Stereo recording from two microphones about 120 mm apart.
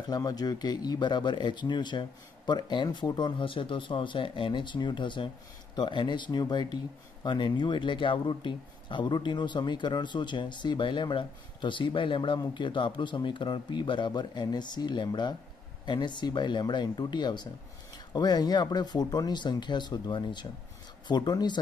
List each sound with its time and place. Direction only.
0.1 s speech: 35° left (ahead or behind)